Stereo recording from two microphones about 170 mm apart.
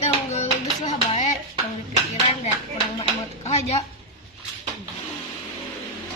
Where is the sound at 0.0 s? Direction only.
40° left (ahead or behind).